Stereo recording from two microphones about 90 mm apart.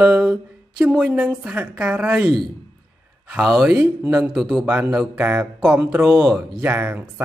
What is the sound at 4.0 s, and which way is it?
Speech, 20° right (ahead or behind).